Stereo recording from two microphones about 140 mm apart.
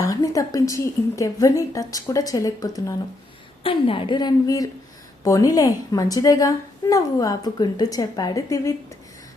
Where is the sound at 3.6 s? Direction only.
40° left (ahead or behind).